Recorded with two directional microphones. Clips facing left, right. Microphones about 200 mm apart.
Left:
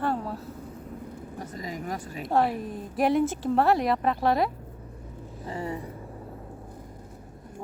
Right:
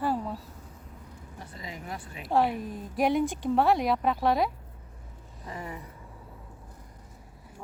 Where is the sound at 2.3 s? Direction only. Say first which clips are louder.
Left 1 dB; centre (ahead or behind).